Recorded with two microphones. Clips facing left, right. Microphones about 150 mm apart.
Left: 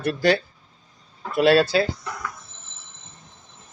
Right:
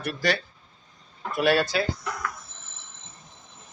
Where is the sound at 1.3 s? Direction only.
25° left (ahead or behind).